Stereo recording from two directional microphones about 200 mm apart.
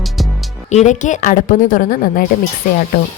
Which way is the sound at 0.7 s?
35° left (ahead or behind).